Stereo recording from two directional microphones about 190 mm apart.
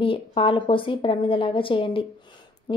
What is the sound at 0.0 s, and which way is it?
A woman's voice, 30° left (ahead or behind).